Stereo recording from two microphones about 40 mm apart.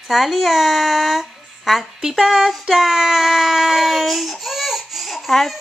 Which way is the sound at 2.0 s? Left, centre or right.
Centre.